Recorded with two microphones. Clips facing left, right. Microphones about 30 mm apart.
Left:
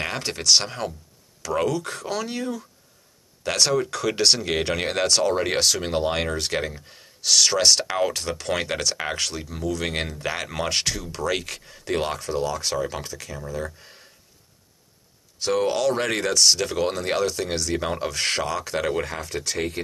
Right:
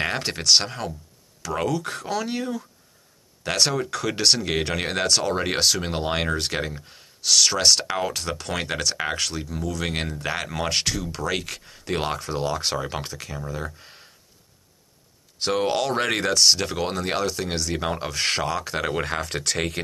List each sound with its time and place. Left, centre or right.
0.0 s speech: centre
0.7 s speech: centre
12.4 s speech: right
13.2 s speech: centre
15.5 s speech: centre
19.2 s speech: right